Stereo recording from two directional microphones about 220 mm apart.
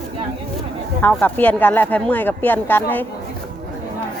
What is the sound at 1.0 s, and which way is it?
Speech, 5° left (ahead or behind).